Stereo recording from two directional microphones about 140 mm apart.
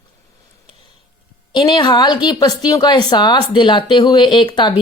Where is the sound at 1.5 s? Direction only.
35° left (ahead or behind).